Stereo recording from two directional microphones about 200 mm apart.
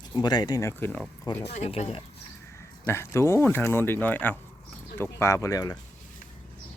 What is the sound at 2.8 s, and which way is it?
Speech, 10° left (ahead or behind).